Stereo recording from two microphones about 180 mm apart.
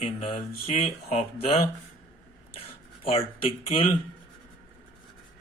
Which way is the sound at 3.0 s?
30° left (ahead or behind).